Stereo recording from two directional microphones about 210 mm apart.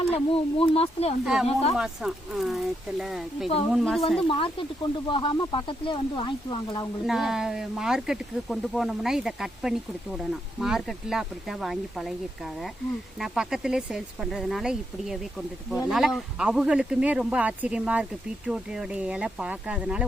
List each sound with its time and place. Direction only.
0.1 s speech: 25° left (ahead or behind)
1.2 s speech: centre (ahead or behind)
4.3 s speech: 25° left (ahead or behind)
7.0 s speech: centre (ahead or behind)